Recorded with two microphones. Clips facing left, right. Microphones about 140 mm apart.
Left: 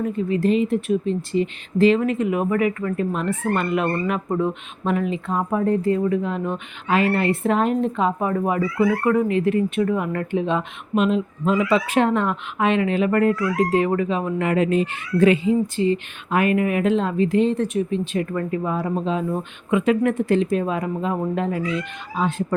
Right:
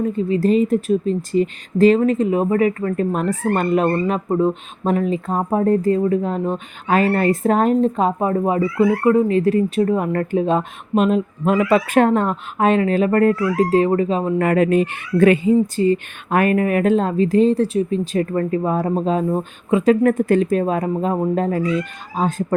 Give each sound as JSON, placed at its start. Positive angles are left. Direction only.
{"t": 0.0, "sound": "speech", "side_deg": -30}
{"t": 8.4, "sound": "speech", "side_deg": -25}
{"t": 9.2, "sound": "speech", "side_deg": -35}
{"t": 14.3, "sound": "speech", "side_deg": -50}
{"t": 15.6, "sound": "speech", "side_deg": -40}